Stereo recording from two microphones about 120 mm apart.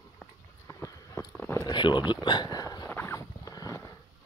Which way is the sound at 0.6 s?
25° left (ahead or behind).